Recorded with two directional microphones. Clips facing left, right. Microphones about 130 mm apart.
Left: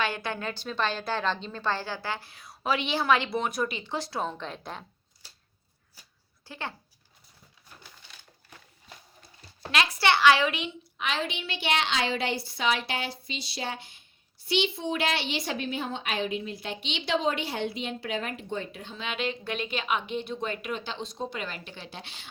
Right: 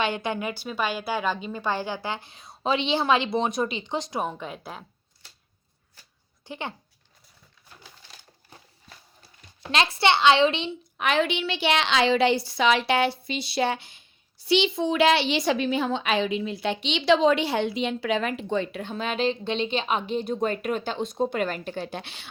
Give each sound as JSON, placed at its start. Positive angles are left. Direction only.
{"t": 0.0, "sound": "a woman's voice", "side_deg": -20}
{"t": 6.4, "sound": "speech", "side_deg": -20}
{"t": 9.7, "sound": "a woman's voice", "side_deg": -25}
{"t": 10.9, "sound": "a woman's voice", "side_deg": -55}
{"t": 19.0, "sound": "a woman's voice", "side_deg": -35}